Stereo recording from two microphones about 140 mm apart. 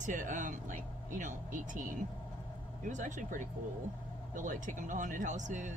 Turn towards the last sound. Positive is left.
turn(degrees=-60)  # may be behind; listen again after turning